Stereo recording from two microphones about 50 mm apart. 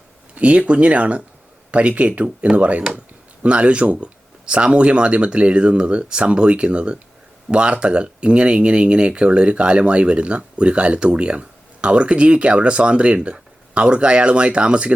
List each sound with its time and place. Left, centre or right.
0.3 s speech: right